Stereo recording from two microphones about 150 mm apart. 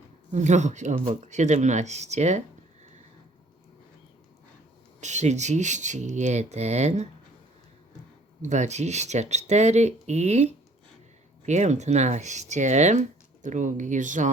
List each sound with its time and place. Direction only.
0.3 s speech: 50° right (ahead or behind)
4.9 s speech: 50° right (ahead or behind)
8.4 s speech: 50° right (ahead or behind)